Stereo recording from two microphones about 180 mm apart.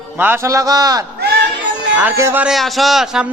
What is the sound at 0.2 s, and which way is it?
A man's voice, 15° right (ahead or behind).